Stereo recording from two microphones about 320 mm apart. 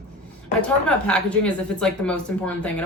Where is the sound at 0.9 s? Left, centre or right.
Centre.